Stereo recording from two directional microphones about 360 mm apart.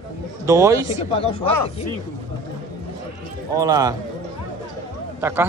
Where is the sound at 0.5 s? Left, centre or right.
Centre.